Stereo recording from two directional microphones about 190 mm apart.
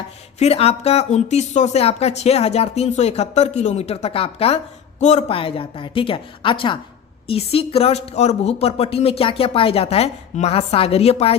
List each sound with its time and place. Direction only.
0.3 s speech: 35° left (ahead or behind)